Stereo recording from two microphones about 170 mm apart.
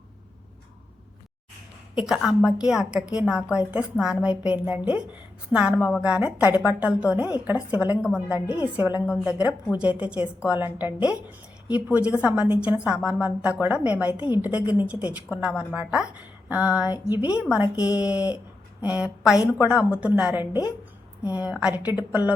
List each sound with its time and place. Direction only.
2.0 s a woman's voice: 5° right (ahead or behind)
20.4 s a woman's voice: 25° left (ahead or behind)
21.3 s a woman's voice: 5° right (ahead or behind)